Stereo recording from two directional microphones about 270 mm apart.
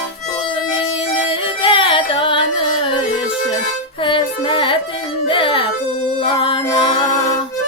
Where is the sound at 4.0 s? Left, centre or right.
Centre.